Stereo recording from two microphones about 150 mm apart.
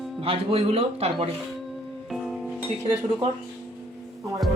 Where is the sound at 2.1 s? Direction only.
Centre (ahead or behind).